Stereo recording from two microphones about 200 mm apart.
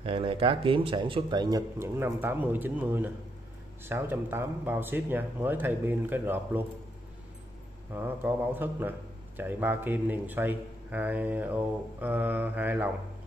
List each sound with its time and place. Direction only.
0.0 s speech: 25° right (ahead or behind); by 6.6 s 10° right (ahead or behind)
7.9 s speech: 10° right (ahead or behind)